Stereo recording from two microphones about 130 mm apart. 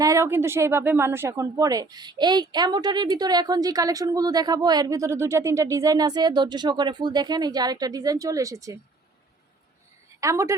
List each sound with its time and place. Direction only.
0.0 s speech: 25° right (ahead or behind)
10.2 s a woman's voice: 25° right (ahead or behind)